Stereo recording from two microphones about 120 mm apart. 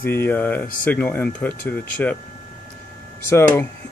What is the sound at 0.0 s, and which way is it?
Speech, 15° left (ahead or behind).